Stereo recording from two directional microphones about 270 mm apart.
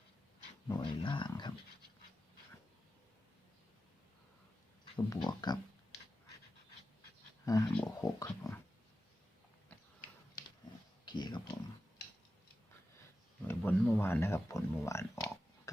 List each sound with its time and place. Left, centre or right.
0.7 s speech: centre
4.9 s speech: centre
7.4 s speech: centre
11.0 s a sound: centre
13.5 s speech: centre